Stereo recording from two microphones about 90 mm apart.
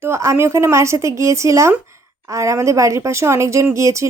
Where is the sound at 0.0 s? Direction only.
30° right (ahead or behind).